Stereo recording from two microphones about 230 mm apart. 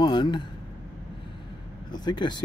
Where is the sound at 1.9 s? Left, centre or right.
Centre.